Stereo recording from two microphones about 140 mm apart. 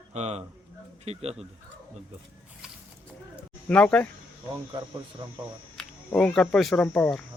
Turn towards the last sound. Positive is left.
turn(degrees=10)  # may be behind; listen again after turning